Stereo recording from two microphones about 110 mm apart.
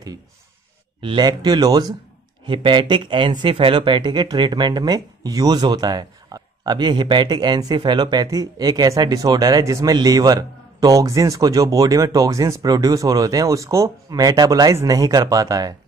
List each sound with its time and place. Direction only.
1.0 s speech: 45° right (ahead or behind)
2.4 s speech: 50° right (ahead or behind)